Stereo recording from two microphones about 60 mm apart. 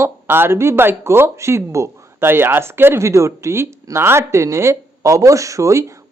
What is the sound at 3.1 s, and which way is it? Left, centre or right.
Speech, right.